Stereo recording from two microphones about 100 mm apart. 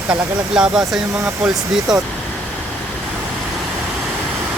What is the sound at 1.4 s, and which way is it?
Speech, 5° right (ahead or behind).